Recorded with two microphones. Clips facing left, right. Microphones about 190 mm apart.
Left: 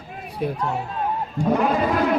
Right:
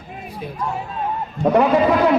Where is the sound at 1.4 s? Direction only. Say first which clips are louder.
Right 5 dB; 70° right (ahead or behind).